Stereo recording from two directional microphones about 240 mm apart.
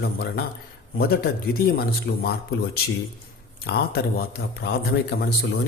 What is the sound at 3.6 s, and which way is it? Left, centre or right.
A man's voice, left.